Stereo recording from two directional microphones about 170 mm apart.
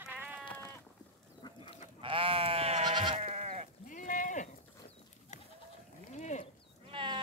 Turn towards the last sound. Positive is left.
turn(degrees=-30)  # may be behind; listen again after turning